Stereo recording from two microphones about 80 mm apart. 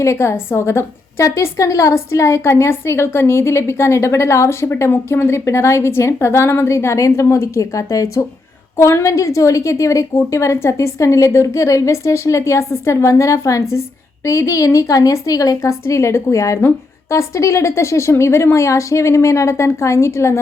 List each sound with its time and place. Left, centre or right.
0.0 s a woman's voice: left